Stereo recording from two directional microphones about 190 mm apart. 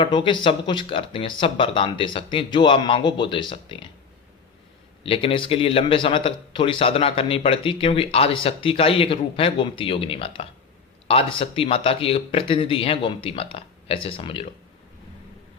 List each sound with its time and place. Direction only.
0.0 s speech: 25° left (ahead or behind)
5.0 s speech: 30° left (ahead or behind)